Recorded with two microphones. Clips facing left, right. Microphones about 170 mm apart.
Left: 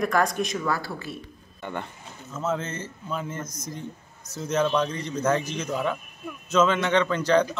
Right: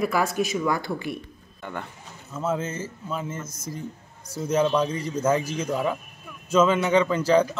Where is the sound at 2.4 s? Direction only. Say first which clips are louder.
Right 1 dB; 10° right (ahead or behind).